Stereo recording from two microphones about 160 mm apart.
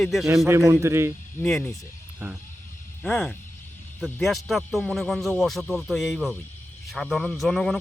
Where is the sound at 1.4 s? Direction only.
5° left (ahead or behind).